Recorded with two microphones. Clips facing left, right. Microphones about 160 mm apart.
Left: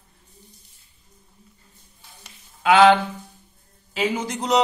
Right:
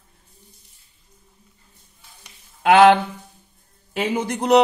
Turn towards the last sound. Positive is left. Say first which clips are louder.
# right 5 dB
turn(degrees=-55)  # may be behind; listen again after turning